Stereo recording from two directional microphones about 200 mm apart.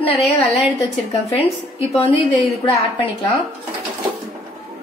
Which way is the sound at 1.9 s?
30° left (ahead or behind).